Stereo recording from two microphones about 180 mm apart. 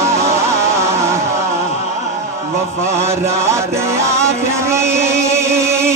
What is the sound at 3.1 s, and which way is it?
Music, 15° right (ahead or behind).